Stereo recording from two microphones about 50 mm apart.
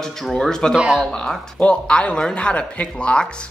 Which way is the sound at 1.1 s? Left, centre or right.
Centre.